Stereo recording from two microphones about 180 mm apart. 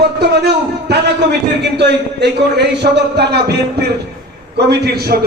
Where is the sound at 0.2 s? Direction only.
70° right (ahead or behind).